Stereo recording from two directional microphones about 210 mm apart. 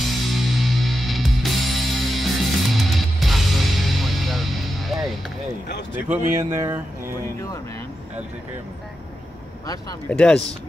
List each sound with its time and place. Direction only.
0.3 s music: centre (ahead or behind)
5.9 s speech: 10° right (ahead or behind)
9.7 s speech: 15° left (ahead or behind)
10.1 s speech: 5° left (ahead or behind)